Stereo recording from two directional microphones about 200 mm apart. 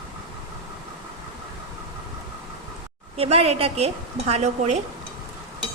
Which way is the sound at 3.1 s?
30° right (ahead or behind).